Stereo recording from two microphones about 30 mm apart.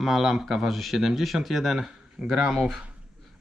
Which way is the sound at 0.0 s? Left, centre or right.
Centre.